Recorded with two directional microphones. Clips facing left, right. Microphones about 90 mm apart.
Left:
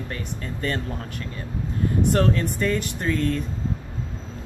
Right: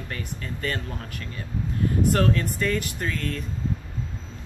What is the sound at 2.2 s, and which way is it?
Speech, 25° left (ahead or behind).